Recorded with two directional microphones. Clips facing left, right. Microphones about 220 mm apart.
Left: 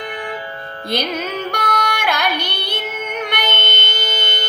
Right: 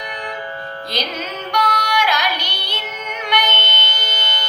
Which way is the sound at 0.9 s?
55° left (ahead or behind).